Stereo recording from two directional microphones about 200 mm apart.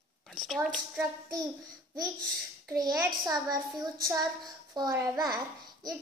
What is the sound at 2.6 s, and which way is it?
A child's voice, 15° right (ahead or behind).